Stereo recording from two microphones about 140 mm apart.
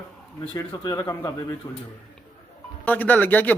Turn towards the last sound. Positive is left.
turn(degrees=15)  # may be behind; listen again after turning